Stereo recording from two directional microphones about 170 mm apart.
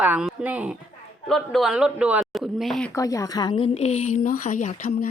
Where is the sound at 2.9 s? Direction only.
20° left (ahead or behind); by 5.0 s 50° left (ahead or behind).